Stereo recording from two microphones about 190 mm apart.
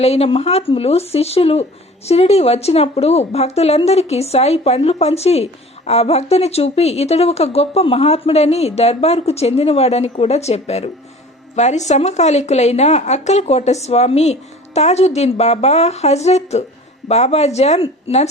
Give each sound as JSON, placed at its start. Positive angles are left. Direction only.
{"t": 0.0, "sound": "a woman's voice", "side_deg": 35}